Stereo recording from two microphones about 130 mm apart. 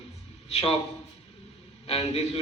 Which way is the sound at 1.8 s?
50° left (ahead or behind).